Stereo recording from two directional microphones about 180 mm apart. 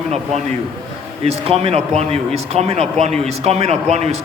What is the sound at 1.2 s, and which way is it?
A man's voice, 35° right (ahead or behind).